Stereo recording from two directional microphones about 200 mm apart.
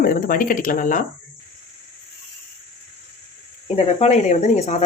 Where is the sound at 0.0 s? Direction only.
45° left (ahead or behind).